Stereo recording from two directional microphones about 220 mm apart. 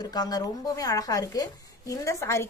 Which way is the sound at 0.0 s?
20° left (ahead or behind).